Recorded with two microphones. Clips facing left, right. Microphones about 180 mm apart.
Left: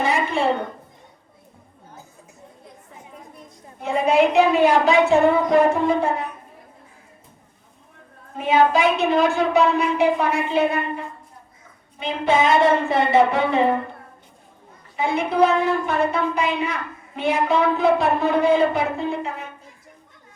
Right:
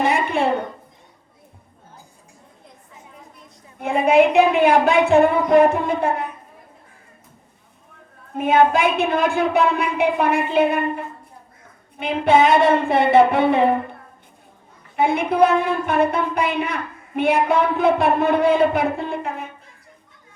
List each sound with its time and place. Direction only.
0.0 s a sound: 60° right (ahead or behind)
3.8 s a woman's voice: 55° right (ahead or behind)
8.4 s a woman's voice: 55° right (ahead or behind)
14.9 s a woman's voice: 55° right (ahead or behind)